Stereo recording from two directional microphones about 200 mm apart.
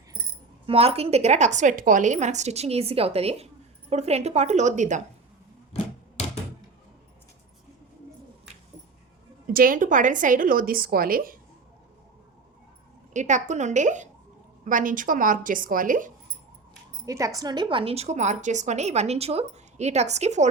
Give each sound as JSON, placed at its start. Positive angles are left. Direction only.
{"t": 0.7, "sound": "a woman's voice", "side_deg": -30}
{"t": 9.5, "sound": "a woman's voice", "side_deg": -45}
{"t": 13.1, "sound": "a woman's voice", "side_deg": -35}
{"t": 17.1, "sound": "a woman's voice", "side_deg": -15}